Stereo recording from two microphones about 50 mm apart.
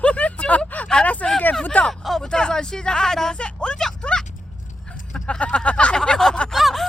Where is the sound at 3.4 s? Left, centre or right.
Left.